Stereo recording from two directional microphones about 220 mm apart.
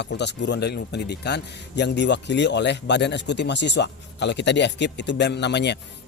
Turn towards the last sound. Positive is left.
turn(degrees=50)  # may be behind; listen again after turning